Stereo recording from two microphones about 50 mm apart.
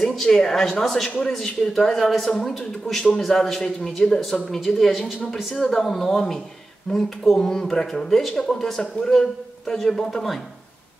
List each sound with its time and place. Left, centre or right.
0.0 s speech: centre